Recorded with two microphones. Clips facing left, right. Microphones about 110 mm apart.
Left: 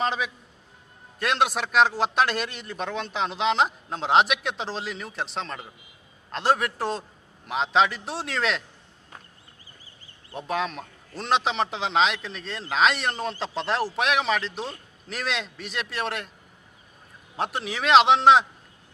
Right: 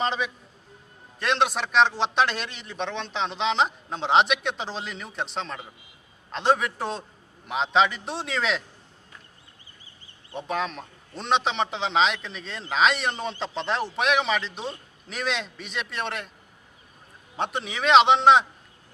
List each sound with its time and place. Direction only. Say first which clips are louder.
0.0 s a sound: even; centre (ahead or behind)
1.2 s a man's voice: even; 5° left (ahead or behind)
10.3 s a man's voice: left 1 dB; centre (ahead or behind)
17.3 s a man's voice: even; centre (ahead or behind)